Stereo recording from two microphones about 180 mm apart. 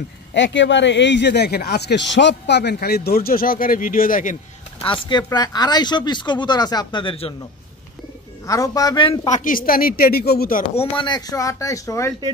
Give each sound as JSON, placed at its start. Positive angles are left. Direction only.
{"t": 0.3, "sound": "speech", "side_deg": 85}
{"t": 2.1, "sound": "speech", "side_deg": 75}
{"t": 4.8, "sound": "speech", "side_deg": 30}
{"t": 8.5, "sound": "speech", "side_deg": 20}
{"t": 9.3, "sound": "speech", "side_deg": 50}
{"t": 10.6, "sound": "speech", "side_deg": 25}